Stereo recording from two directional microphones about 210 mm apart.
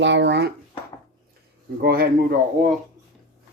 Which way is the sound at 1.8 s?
45° right (ahead or behind).